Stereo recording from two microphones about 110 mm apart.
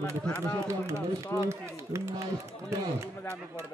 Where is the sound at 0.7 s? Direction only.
25° right (ahead or behind).